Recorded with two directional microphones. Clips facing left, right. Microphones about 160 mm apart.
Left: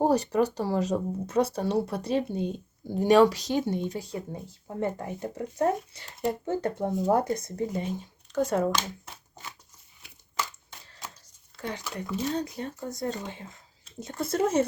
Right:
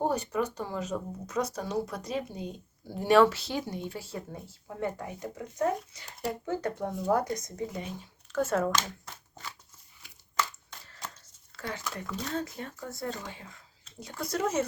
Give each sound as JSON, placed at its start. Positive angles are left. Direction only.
{"t": 0.0, "sound": "speech", "side_deg": 35}
{"t": 4.7, "sound": "speech", "side_deg": 30}
{"t": 8.3, "sound": "speech", "side_deg": 15}
{"t": 11.5, "sound": "speech", "side_deg": 15}